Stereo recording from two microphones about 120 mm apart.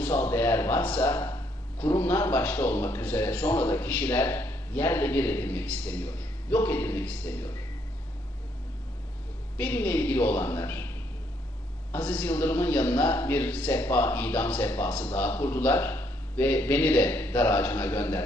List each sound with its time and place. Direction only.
0.0 s a man's voice: 15° left (ahead or behind)
9.6 s a man's voice: 15° left (ahead or behind)